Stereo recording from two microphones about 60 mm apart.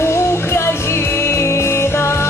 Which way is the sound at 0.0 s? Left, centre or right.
Left.